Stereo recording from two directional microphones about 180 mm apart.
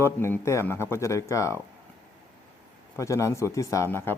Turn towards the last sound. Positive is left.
turn(degrees=15)  # may be behind; listen again after turning